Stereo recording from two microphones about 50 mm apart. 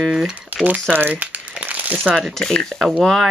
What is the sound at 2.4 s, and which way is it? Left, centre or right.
Speech, centre.